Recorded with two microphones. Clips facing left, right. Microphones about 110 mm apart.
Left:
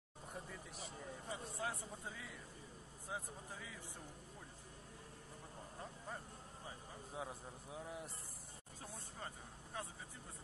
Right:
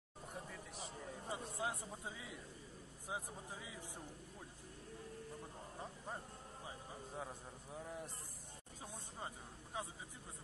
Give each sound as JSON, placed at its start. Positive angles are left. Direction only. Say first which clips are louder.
{"t": 0.3, "sound": "a sound", "louder": "even", "side_deg": 0}
{"t": 1.3, "sound": "a man's voice", "louder": "right 2 dB", "side_deg": -20}
{"t": 7.2, "sound": "a man's voice", "louder": "left 3 dB", "side_deg": 5}
{"t": 9.8, "sound": "speech", "louder": "right 2 dB", "side_deg": -15}